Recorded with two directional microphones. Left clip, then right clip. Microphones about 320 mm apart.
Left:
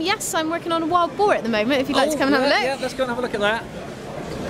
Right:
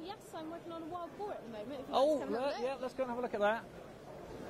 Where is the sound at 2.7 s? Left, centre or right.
Right.